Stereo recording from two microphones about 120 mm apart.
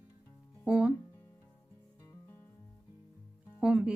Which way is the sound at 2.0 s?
25° left (ahead or behind).